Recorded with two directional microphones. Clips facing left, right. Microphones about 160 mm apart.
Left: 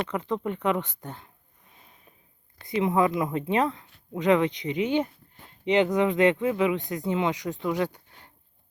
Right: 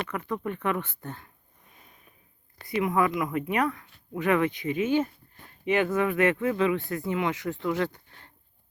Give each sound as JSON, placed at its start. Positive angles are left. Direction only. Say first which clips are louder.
{"t": 0.1, "sound": "speech", "louder": "left 3 dB", "side_deg": 20}
{"t": 2.6, "sound": "speech", "louder": "left 2 dB", "side_deg": 25}